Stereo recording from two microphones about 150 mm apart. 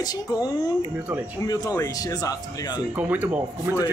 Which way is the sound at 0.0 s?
25° left (ahead or behind).